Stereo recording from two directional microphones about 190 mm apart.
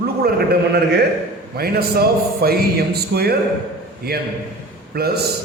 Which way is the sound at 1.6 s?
55° right (ahead or behind).